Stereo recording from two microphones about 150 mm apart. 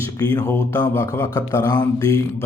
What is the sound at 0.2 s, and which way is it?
Speech, 25° left (ahead or behind).